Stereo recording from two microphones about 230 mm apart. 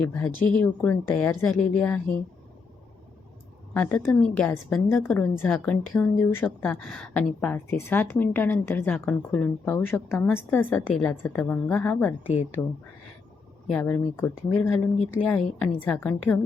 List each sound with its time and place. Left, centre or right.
0.0 s a woman's voice: centre
0.3 s speech: left
0.6 s a woman's voice: centre
3.8 s a woman's voice: centre
13.7 s a woman's voice: centre